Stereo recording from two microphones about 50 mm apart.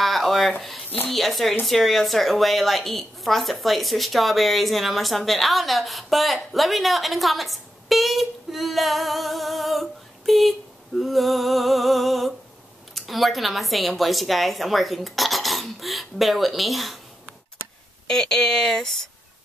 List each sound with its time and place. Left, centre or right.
0.0 s a sound: centre
1.1 s a woman's voice: centre
18.0 s speech: centre